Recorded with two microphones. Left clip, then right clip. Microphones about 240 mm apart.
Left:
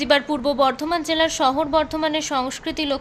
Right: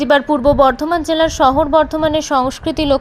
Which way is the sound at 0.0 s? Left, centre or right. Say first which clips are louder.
Right 7 dB; centre.